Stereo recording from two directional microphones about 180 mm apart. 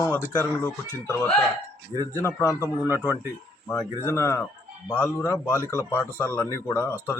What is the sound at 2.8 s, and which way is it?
Speech, 15° right (ahead or behind).